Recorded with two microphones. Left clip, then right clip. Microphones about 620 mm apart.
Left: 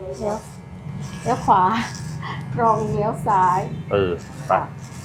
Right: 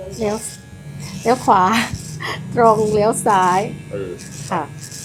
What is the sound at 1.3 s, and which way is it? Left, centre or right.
Speech, right.